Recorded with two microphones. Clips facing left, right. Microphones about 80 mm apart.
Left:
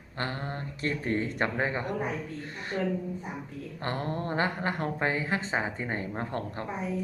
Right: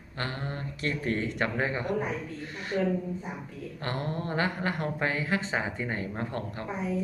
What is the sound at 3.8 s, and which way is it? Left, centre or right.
A woman's voice, left.